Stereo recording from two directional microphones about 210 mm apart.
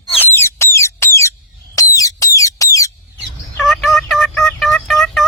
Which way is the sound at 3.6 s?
Centre (ahead or behind).